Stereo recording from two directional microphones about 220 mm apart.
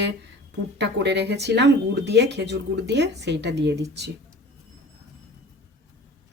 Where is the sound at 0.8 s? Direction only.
50° right (ahead or behind).